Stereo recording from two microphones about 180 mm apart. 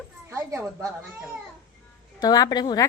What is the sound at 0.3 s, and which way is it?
Speech, 15° right (ahead or behind).